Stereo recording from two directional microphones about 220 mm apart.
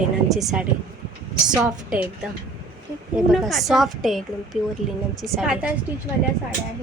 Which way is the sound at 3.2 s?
Centre (ahead or behind).